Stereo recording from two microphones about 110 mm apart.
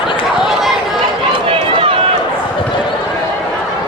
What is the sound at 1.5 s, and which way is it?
Run, 55° right (ahead or behind).